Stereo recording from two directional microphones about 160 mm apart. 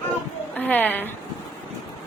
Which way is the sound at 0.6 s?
10° left (ahead or behind).